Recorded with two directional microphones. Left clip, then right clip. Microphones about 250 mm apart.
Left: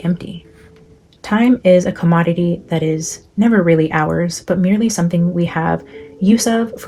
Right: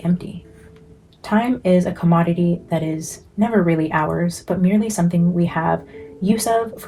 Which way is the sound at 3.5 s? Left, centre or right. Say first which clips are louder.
Left 5 dB; left.